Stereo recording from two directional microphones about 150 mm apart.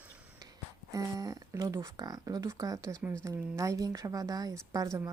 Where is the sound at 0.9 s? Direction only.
20° right (ahead or behind).